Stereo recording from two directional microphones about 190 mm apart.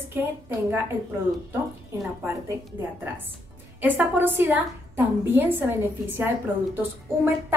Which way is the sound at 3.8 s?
10° right (ahead or behind).